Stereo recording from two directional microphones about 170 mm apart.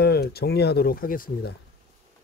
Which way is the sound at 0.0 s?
70° left (ahead or behind).